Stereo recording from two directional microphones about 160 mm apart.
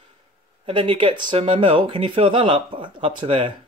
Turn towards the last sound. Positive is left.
turn(degrees=-30)  # may be behind; listen again after turning